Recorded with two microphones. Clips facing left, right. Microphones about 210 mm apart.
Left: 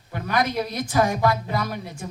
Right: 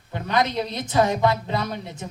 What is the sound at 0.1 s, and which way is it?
Speech, 25° right (ahead or behind).